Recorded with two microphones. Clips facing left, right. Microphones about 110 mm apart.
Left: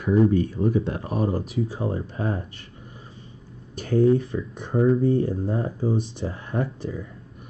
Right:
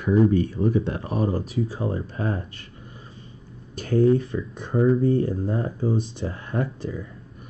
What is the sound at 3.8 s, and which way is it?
Speech, 15° left (ahead or behind).